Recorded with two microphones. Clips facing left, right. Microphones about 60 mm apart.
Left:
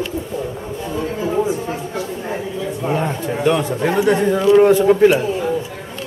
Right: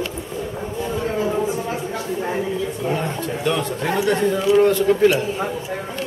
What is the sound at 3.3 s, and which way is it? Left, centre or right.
Speech, centre.